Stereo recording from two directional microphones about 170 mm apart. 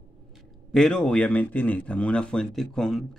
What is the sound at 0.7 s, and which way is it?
Speech, 5° left (ahead or behind).